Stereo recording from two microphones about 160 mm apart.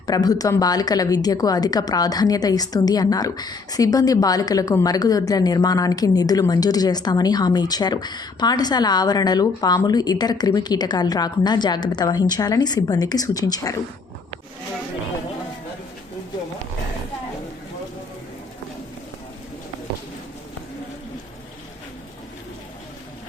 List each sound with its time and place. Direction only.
0.1 s a woman's voice: 25° left (ahead or behind)